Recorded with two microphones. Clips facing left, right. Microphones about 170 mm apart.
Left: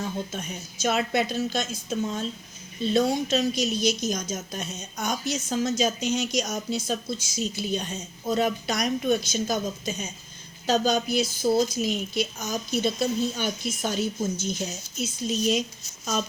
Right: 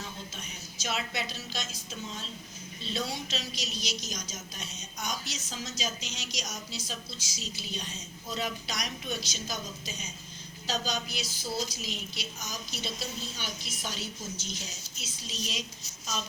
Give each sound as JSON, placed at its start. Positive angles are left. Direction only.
{"t": 0.0, "sound": "a woman's voice", "side_deg": 50}